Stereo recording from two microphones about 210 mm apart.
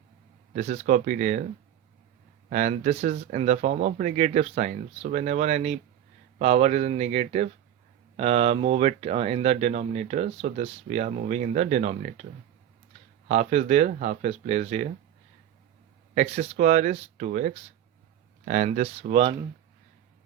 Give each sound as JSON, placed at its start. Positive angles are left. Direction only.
{"t": 0.5, "sound": "speech", "side_deg": -35}
{"t": 2.5, "sound": "speech", "side_deg": -35}
{"t": 13.2, "sound": "speech", "side_deg": -35}
{"t": 16.1, "sound": "speech", "side_deg": -30}